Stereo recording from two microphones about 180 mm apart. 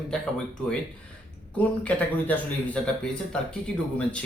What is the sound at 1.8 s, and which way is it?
Speech, 10° left (ahead or behind).